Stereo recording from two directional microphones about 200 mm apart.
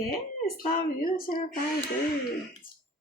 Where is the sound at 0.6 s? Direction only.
45° left (ahead or behind).